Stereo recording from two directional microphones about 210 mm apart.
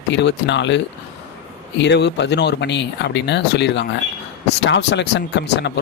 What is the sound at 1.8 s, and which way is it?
Speech, 55° left (ahead or behind).